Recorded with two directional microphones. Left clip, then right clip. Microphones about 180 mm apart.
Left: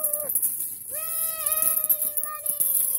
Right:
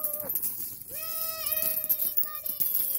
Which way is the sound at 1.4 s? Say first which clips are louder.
Left 6 dB; 20° left (ahead or behind).